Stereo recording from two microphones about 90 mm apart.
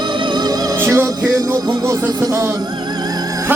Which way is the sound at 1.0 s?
40° right (ahead or behind).